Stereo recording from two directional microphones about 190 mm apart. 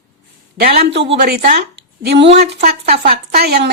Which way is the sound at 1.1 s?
55° right (ahead or behind).